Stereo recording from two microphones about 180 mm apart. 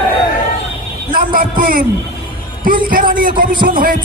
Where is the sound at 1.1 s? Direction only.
50° right (ahead or behind).